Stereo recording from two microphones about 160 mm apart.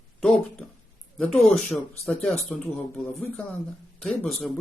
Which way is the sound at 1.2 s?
5° left (ahead or behind).